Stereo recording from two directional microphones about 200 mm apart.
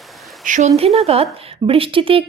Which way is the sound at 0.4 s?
40° right (ahead or behind).